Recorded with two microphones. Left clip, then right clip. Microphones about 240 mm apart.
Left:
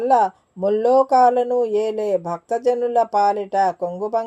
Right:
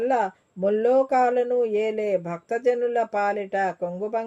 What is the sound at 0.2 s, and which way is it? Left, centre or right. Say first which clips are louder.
Speech: left 6 dB; left.